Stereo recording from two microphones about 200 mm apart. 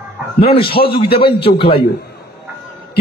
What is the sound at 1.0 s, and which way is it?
Speech, 25° left (ahead or behind).